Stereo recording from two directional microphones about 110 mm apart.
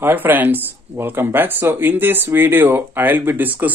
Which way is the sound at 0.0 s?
20° right (ahead or behind).